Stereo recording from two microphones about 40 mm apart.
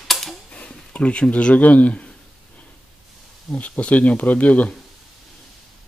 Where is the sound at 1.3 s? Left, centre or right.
Left.